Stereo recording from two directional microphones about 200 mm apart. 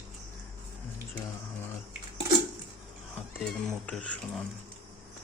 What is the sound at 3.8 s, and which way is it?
Speech, 5° left (ahead or behind).